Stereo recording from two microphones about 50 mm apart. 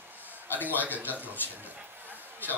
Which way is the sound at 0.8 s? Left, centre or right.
Right.